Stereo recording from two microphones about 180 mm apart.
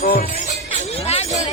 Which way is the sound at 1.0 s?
35° left (ahead or behind).